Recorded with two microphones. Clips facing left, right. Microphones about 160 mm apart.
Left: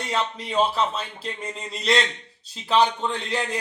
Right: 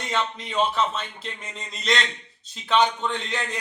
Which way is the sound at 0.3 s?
35° left (ahead or behind).